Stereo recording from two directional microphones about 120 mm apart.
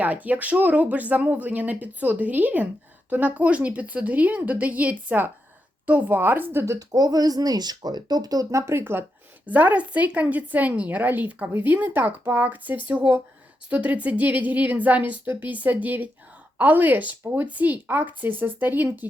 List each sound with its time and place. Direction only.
0.0 s speech: 15° right (ahead or behind)